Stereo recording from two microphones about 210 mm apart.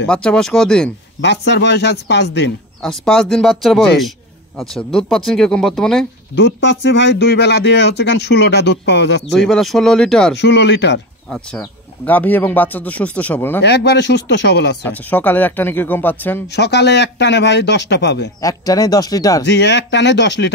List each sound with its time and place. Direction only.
0.0 s speech: 5° left (ahead or behind)
1.2 s speech: 55° left (ahead or behind)
2.8 s speech: 5° left (ahead or behind)
6.3 s speech: 55° left (ahead or behind)
9.3 s speech: centre (ahead or behind)
10.3 s speech: 55° left (ahead or behind)
11.2 s speech: 5° left (ahead or behind)
13.6 s speech: 55° left (ahead or behind)
14.9 s speech: 10° left (ahead or behind)
16.4 s speech: 50° left (ahead or behind)
18.4 s speech: 15° left (ahead or behind)
19.4 s speech: 55° left (ahead or behind)